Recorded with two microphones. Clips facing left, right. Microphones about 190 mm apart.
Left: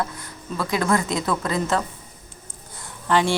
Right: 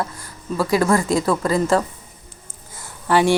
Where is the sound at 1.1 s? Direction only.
35° right (ahead or behind).